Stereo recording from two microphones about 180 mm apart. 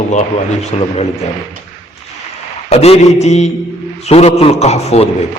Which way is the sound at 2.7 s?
35° left (ahead or behind).